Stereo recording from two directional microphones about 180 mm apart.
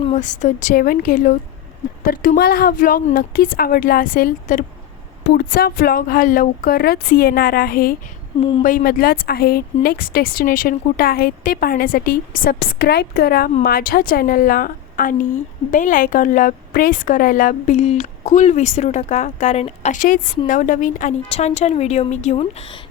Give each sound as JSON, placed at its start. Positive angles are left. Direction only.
{"t": 0.0, "sound": "a woman's voice", "side_deg": 40}